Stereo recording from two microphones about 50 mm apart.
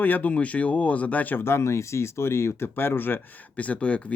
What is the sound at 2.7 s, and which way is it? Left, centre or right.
Speech, left.